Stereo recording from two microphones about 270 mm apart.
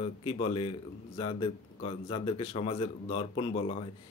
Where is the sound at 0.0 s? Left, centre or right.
Left.